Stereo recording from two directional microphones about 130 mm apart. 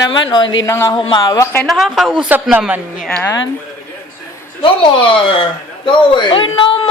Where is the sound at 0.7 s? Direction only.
20° left (ahead or behind).